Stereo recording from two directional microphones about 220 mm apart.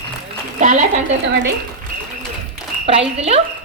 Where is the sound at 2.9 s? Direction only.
25° right (ahead or behind).